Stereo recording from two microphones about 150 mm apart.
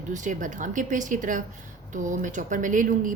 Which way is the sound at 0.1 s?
55° right (ahead or behind).